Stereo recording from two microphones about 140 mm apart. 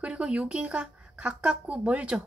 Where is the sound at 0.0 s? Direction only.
10° right (ahead or behind).